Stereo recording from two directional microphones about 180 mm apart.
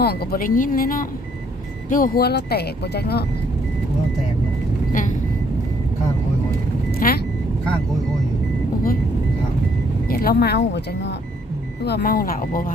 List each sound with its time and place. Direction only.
0.0 s speech: 60° left (ahead or behind)
4.9 s speech: 45° left (ahead or behind)
6.9 s vehicle: 55° left (ahead or behind)
10.1 s speech: 60° left (ahead or behind)
11.8 s speech: 65° left (ahead or behind)